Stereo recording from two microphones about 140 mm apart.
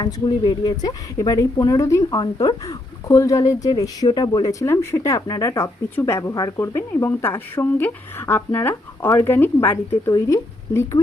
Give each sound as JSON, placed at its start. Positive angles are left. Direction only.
{"t": 0.0, "sound": "speech", "side_deg": 35}